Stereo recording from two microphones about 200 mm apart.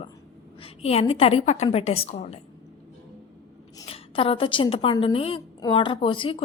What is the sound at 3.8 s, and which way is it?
A woman's voice, 30° left (ahead or behind).